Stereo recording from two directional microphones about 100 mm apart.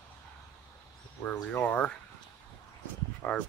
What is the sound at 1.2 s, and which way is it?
Speech, 15° left (ahead or behind).